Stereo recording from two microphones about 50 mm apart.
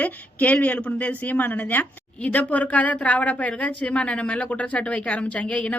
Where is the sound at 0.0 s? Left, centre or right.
Left.